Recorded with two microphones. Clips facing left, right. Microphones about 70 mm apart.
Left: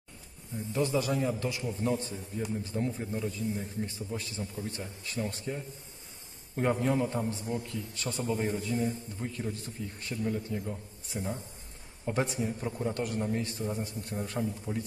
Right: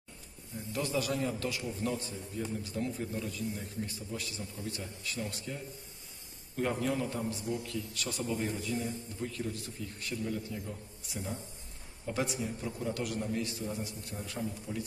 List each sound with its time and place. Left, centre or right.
0.7 s a man's voice: left